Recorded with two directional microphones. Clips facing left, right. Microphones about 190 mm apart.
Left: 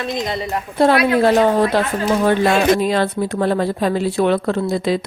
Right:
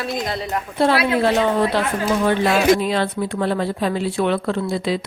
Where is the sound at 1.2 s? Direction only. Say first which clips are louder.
Left 4 dB; 40° left (ahead or behind).